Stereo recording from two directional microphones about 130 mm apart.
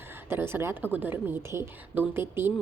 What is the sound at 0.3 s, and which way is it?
A woman's voice, 20° right (ahead or behind).